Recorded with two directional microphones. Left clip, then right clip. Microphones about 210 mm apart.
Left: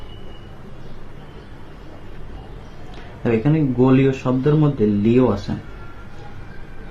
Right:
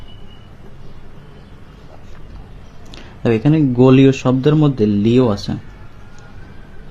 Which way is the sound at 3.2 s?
45° right (ahead or behind).